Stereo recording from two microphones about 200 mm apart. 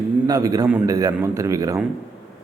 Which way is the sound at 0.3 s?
15° right (ahead or behind).